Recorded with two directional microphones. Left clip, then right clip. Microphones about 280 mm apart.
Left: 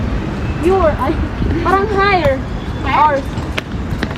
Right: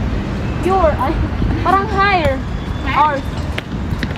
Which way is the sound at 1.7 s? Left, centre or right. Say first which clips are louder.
Left 1 dB; right.